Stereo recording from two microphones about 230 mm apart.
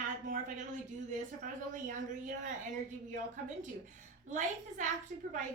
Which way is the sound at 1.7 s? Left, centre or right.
Right.